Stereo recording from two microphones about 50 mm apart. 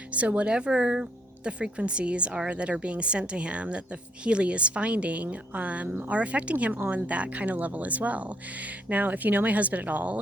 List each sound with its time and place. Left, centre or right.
0.1 s a woman's voice: right